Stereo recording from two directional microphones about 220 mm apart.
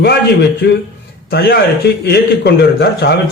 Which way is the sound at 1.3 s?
45° left (ahead or behind).